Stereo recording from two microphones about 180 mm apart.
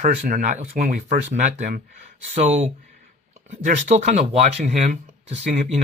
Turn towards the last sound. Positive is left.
turn(degrees=-40)  # may be behind; listen again after turning